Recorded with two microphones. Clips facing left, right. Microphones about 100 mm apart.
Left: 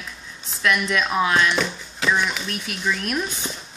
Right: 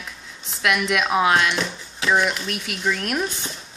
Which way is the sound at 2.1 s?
45° right (ahead or behind).